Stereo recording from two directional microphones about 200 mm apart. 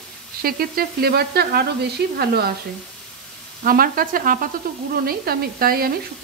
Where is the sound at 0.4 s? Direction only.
50° right (ahead or behind).